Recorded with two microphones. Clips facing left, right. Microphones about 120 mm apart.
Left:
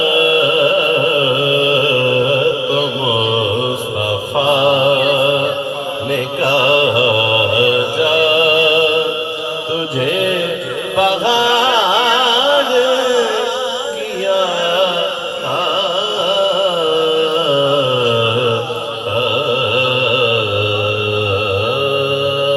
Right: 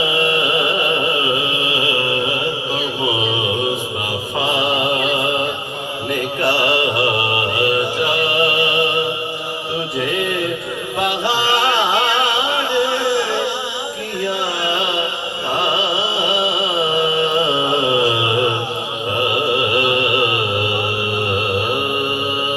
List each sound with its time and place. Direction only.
4.6 s music: 60° left (ahead or behind)
6.7 s mantra: 60° left (ahead or behind)
8.2 s music: 60° left (ahead or behind)
10.9 s music: 70° left (ahead or behind)
12.2 s music: 90° left